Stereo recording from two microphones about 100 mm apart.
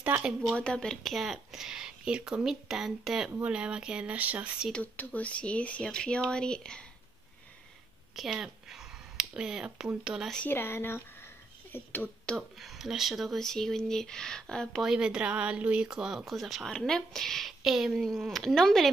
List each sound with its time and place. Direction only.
0.0 s speech: 15° right (ahead or behind)
0.4 s speech: 10° left (ahead or behind); by 4.6 s 15° right (ahead or behind)
4.7 s speech: 15° left (ahead or behind)
8.2 s a sound: 5° right (ahead or behind)
9.8 s speech: 5° right (ahead or behind)
10.5 s speech: 25° left (ahead or behind)
12.4 s speech: centre (ahead or behind)
14.9 s speech: 10° right (ahead or behind)